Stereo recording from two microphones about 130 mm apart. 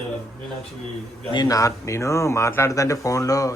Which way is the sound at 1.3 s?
30° left (ahead or behind).